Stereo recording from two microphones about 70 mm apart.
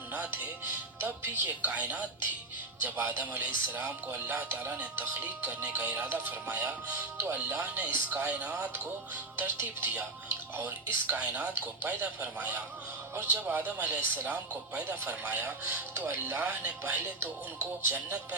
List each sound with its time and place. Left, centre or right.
1.0 s speech: right
9.3 s speech: right